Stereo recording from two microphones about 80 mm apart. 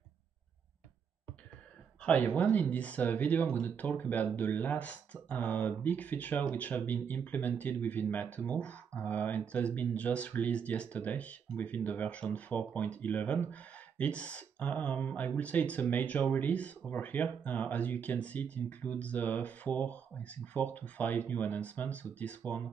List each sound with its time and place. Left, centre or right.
2.0 s speech: centre